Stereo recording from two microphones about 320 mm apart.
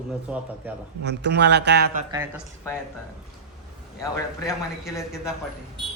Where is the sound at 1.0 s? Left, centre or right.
Right.